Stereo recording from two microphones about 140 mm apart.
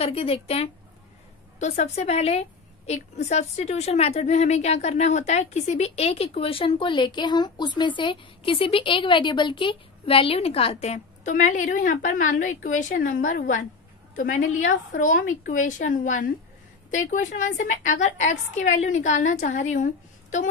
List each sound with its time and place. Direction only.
0.0 s a woman's voice: 45° left (ahead or behind)
1.6 s a woman's voice: 55° left (ahead or behind)